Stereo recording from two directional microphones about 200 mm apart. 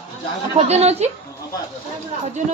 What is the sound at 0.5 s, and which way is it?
Speech, 30° right (ahead or behind).